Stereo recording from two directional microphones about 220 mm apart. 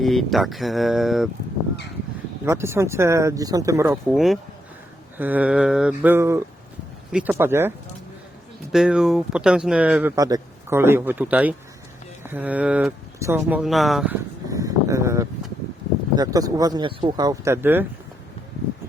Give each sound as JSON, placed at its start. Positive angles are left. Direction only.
{"t": 0.0, "sound": "speech", "side_deg": 0}
{"t": 2.4, "sound": "speech", "side_deg": -10}
{"t": 4.1, "sound": "speech", "side_deg": 0}
{"t": 8.7, "sound": "speech", "side_deg": 0}
{"t": 14.5, "sound": "a sound", "side_deg": -15}
{"t": 16.1, "sound": "speech", "side_deg": -15}